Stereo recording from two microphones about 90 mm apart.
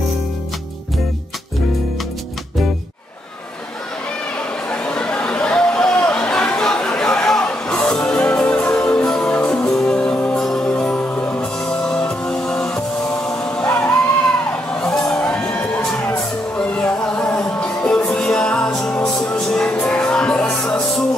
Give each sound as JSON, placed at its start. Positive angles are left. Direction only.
{"t": 4.6, "sound": "chatter", "side_deg": 15}
{"t": 9.5, "sound": "music", "side_deg": 10}